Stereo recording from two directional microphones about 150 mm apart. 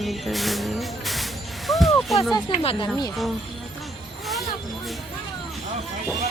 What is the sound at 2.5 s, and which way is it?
Speech, 40° left (ahead or behind).